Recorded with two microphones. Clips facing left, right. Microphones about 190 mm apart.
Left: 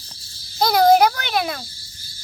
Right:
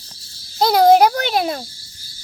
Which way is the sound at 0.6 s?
30° right (ahead or behind).